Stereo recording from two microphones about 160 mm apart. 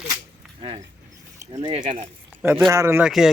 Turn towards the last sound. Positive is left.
turn(degrees=-5)  # may be behind; listen again after turning